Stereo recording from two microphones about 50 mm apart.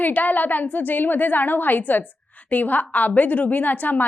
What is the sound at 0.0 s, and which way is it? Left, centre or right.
A woman's voice, left.